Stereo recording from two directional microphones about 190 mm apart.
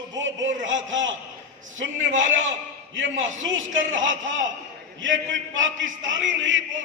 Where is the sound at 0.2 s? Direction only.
80° right.